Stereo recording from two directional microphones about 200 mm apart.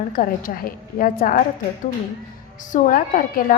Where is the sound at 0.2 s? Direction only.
45° left (ahead or behind).